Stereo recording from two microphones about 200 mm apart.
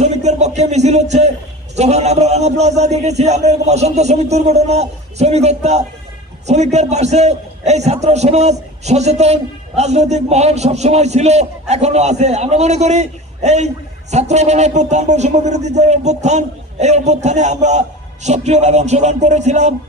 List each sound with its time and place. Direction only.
0.0 s music: 35° right (ahead or behind)
1.8 s a man's voice: 35° right (ahead or behind)